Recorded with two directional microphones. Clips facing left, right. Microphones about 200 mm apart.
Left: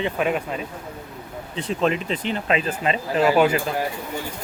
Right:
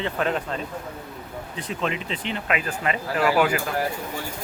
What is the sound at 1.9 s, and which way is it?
Speech, 40° left (ahead or behind).